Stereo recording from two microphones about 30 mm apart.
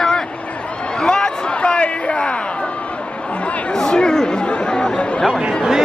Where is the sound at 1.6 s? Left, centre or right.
Left.